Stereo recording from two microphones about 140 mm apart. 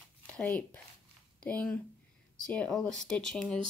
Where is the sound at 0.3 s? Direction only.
10° left (ahead or behind).